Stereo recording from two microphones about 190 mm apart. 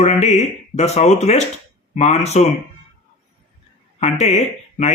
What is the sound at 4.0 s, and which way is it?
Speech, 35° left (ahead or behind).